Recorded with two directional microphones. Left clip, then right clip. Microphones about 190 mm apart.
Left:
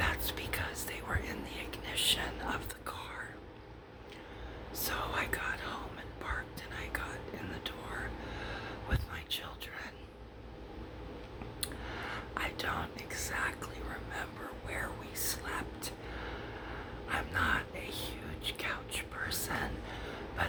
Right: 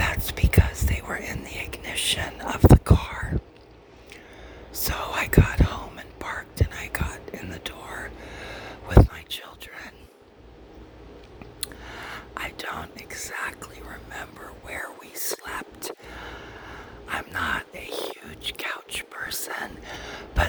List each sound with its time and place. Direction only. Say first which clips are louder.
0.0 s whispering: right 7 dB; 35° right (ahead or behind)
4.7 s whispering: right 7 dB; 40° right (ahead or behind)
11.6 s whispering: right 4 dB; 45° right (ahead or behind)
14.7 s whispering: right 6 dB; 40° right (ahead or behind)